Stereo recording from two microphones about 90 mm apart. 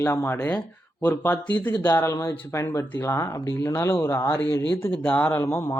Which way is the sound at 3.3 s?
40° left (ahead or behind).